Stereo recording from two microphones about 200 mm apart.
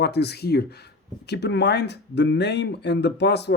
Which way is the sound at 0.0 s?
55° left (ahead or behind).